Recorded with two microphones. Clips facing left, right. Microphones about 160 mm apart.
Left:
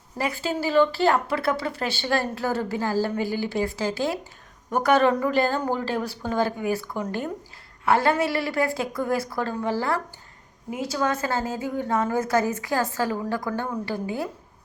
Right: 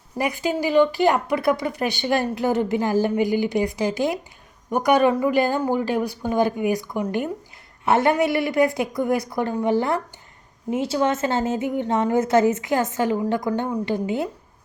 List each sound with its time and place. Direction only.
0.2 s a woman's voice: 15° right (ahead or behind)